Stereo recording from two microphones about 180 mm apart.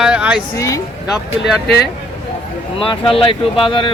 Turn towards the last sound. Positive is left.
turn(degrees=30)  # may be behind; listen again after turning